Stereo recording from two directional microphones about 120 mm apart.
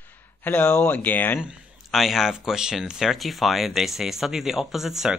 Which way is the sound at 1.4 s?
Centre (ahead or behind).